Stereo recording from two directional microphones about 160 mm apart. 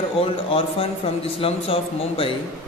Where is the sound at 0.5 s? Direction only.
35° left (ahead or behind).